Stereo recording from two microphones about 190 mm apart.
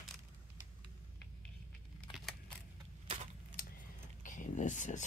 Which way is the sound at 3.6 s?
50° left (ahead or behind).